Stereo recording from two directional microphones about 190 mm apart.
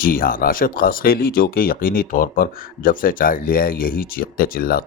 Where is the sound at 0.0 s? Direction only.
50° left (ahead or behind).